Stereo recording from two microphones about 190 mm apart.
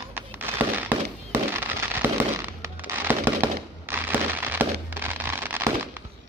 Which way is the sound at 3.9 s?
10° right (ahead or behind).